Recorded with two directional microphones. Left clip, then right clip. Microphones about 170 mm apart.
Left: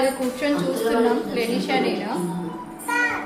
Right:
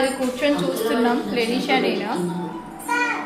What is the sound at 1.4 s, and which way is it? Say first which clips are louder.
Speech: right 2 dB; 35° right (ahead or behind).